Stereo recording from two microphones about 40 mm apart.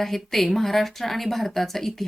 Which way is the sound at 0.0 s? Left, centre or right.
Centre.